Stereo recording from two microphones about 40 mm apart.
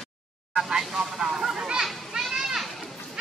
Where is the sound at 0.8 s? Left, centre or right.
Centre.